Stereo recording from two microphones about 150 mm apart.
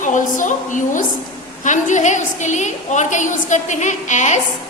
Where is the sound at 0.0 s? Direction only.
55° left (ahead or behind).